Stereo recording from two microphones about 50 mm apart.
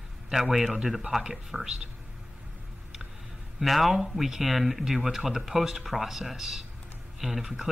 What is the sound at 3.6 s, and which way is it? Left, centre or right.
Speech, centre.